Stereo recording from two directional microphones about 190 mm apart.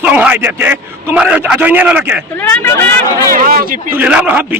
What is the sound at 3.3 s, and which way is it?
Speech, 50° right (ahead or behind).